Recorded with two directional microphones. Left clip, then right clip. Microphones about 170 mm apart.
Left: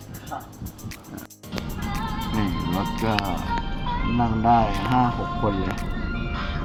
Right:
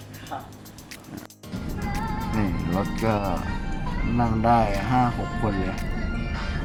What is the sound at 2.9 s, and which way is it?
Speech, centre (ahead or behind).